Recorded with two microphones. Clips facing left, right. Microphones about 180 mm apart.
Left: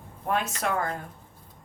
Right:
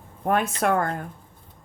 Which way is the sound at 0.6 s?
55° right (ahead or behind).